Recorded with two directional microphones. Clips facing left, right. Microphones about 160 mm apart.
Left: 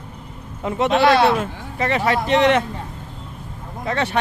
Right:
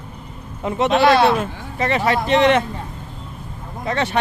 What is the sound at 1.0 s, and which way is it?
Speech, 25° right (ahead or behind).